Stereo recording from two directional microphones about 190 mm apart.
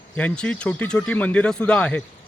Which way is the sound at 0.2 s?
5° left (ahead or behind).